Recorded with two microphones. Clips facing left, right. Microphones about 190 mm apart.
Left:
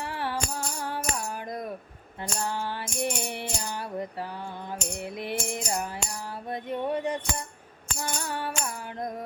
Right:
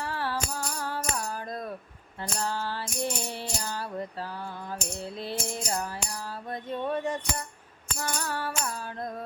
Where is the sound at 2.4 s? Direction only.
15° left (ahead or behind).